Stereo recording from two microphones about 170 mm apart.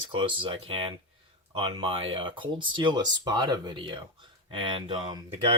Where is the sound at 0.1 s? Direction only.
30° right (ahead or behind).